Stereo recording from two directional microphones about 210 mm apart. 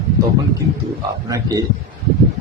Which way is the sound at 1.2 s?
15° right (ahead or behind).